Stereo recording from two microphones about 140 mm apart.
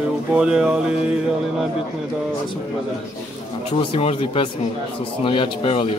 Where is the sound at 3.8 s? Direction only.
45° left (ahead or behind).